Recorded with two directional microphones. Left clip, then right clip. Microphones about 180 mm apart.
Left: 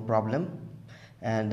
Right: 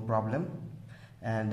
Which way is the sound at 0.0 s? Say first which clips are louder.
Left 4 dB; 25° left (ahead or behind).